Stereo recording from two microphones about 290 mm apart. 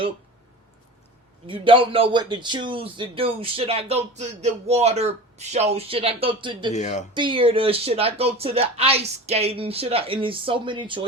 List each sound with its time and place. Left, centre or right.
1.5 s a man's voice: centre
6.7 s speech: left
7.1 s a man's voice: centre